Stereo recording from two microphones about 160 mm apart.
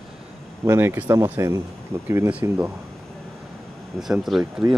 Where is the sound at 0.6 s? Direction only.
15° right (ahead or behind).